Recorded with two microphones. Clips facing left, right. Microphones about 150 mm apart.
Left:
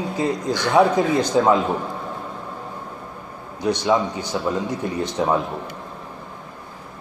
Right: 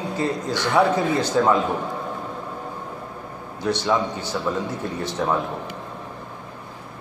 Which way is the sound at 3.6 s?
15° left (ahead or behind).